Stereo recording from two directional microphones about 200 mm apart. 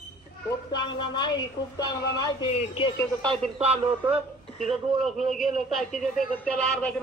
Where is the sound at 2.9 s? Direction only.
5° left (ahead or behind).